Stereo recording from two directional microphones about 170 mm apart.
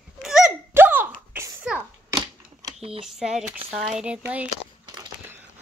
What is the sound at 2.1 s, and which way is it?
Typewriter, 30° right (ahead or behind).